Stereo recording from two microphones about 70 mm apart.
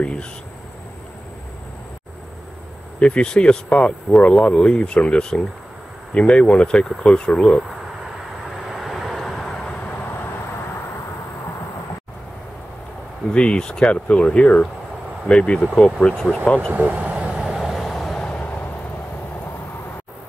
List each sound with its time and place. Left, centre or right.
0.0 s speech: centre
3.0 s speech: centre
8.7 s vehicle: centre
13.3 s speech: centre
16.7 s vehicle: right; by 18.3 s centre
18.3 s vehicle: left